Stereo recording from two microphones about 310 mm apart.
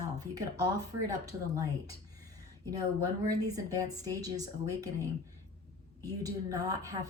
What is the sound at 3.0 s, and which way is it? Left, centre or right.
A woman's voice, centre.